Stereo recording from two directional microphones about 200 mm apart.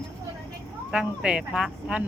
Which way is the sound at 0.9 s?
5° right (ahead or behind).